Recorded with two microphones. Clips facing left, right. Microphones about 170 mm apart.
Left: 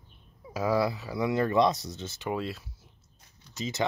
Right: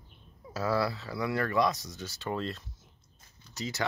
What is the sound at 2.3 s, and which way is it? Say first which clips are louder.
Speech: left 1 dB; 5° left (ahead or behind).